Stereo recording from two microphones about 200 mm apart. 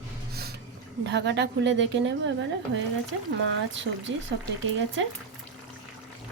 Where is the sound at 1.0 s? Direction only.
60° right (ahead or behind).